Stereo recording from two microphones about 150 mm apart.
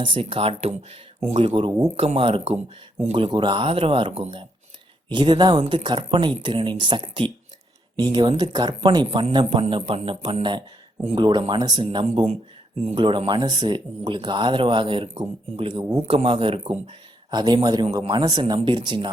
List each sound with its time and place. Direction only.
0.0 s speech: 35° right (ahead or behind)
12.2 s speech: 45° right (ahead or behind)
13.0 s speech: 35° right (ahead or behind)
15.8 s speech: 20° right (ahead or behind)
16.0 s speech: 35° right (ahead or behind)